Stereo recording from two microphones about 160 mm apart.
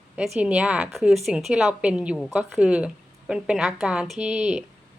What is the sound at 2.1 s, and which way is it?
A woman's voice, 5° left (ahead or behind).